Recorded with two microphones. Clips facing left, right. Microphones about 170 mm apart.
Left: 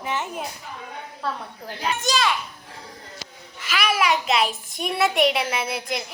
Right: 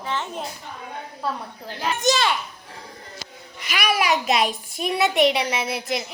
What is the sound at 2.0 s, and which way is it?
Speech, 25° right (ahead or behind).